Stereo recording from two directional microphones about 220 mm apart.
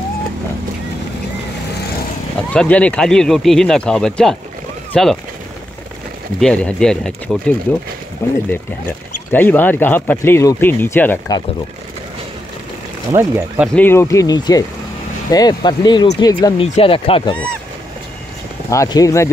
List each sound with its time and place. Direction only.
2.3 s speech: 5° left (ahead or behind)
6.4 s speech: 5° left (ahead or behind)
13.1 s speech: 10° right (ahead or behind)
13.7 s speech: 10° left (ahead or behind)
18.7 s speech: 15° left (ahead or behind)